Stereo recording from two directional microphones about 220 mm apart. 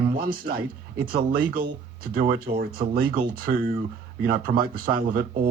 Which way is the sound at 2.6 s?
45° right (ahead or behind).